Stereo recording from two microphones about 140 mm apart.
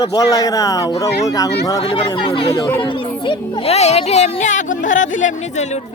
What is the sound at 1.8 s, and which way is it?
A child's voice, 40° left (ahead or behind).